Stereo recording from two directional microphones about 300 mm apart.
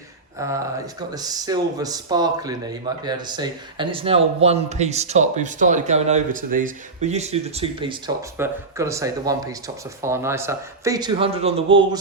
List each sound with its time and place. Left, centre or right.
1.1 s speech: centre